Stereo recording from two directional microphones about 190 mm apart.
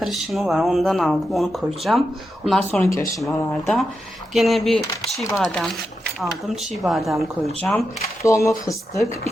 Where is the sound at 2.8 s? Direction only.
15° left (ahead or behind).